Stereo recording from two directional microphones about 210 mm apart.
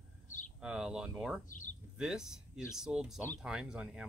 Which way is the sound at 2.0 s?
5° right (ahead or behind).